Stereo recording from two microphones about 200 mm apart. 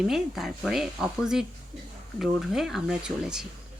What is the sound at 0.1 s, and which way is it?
Speech, centre (ahead or behind).